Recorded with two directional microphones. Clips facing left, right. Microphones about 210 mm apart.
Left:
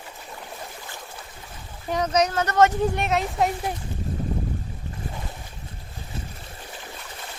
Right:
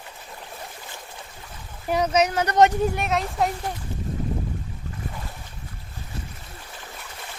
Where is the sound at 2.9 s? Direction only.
Centre (ahead or behind).